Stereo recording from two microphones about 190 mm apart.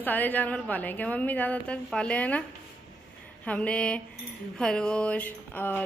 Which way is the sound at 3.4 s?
5° left (ahead or behind).